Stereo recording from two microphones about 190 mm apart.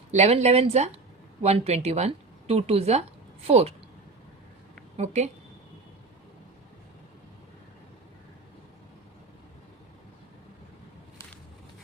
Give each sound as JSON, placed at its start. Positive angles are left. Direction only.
{"t": 0.1, "sound": "speech", "side_deg": -35}
{"t": 4.9, "sound": "speech", "side_deg": -35}